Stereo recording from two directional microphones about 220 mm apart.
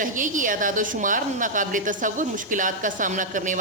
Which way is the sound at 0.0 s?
35° right (ahead or behind).